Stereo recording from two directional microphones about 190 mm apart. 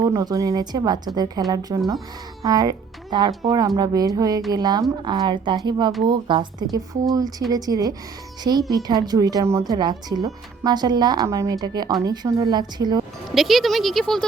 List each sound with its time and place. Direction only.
0.0 s speech: 20° right (ahead or behind)
13.3 s speech: centre (ahead or behind)